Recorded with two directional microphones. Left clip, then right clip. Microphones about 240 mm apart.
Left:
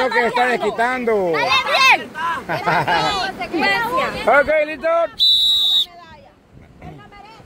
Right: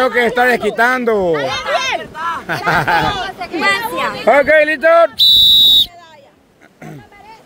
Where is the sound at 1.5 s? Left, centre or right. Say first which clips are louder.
Left 4 dB; left.